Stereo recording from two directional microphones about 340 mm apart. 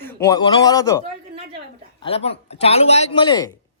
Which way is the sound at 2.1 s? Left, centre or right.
Centre.